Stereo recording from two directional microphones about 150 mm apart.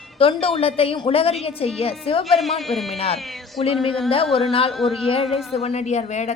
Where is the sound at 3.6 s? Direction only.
40° left (ahead or behind).